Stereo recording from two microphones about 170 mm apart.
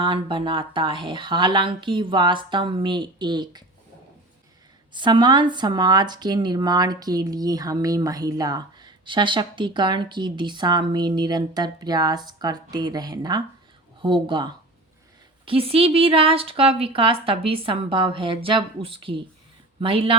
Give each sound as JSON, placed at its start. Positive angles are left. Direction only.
{"t": 0.0, "sound": "speech", "side_deg": -30}
{"t": 4.9, "sound": "a woman's voice", "side_deg": -30}